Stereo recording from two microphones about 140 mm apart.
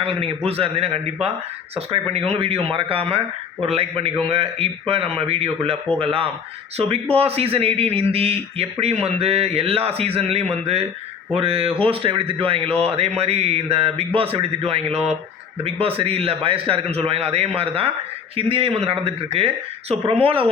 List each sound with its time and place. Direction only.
0.0 s speech: 45° right (ahead or behind)